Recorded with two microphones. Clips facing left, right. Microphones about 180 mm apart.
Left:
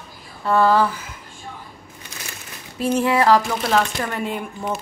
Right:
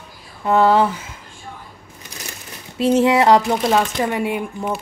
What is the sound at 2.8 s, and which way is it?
Speech, 20° right (ahead or behind).